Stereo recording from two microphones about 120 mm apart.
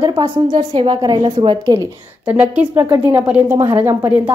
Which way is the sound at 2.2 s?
10° right (ahead or behind).